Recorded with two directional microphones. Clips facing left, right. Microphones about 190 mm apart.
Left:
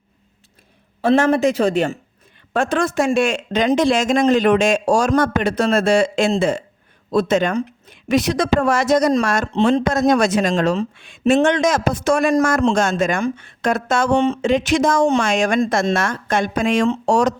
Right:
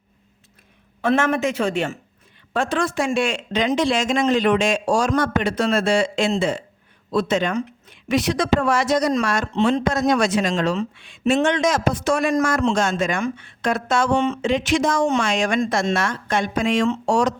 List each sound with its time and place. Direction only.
1.0 s speech: 35° left (ahead or behind)